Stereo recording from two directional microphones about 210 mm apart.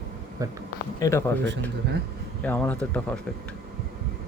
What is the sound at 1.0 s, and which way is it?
Speech, 15° left (ahead or behind).